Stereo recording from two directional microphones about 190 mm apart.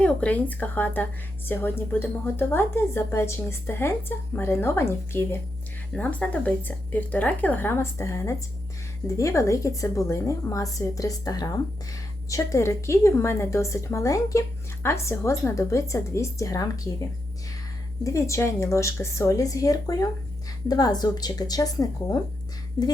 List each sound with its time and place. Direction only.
0.0 s a woman's voice: 5° left (ahead or behind)
18.0 s a woman's voice: 15° left (ahead or behind)